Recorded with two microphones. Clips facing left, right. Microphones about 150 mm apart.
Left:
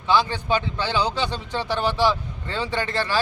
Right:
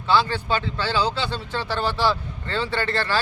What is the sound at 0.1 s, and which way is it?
Speech, 15° left (ahead or behind).